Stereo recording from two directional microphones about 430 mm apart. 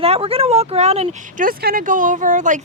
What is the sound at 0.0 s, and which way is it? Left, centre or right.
Speech, centre.